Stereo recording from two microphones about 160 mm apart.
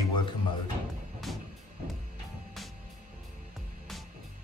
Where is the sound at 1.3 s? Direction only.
Centre (ahead or behind).